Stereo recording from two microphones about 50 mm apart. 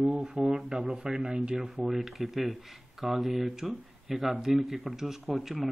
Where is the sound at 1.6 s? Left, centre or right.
Centre.